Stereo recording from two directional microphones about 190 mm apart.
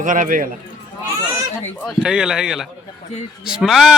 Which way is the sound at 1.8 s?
Centre (ahead or behind).